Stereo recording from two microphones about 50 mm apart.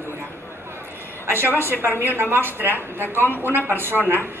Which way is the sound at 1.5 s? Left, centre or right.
Right.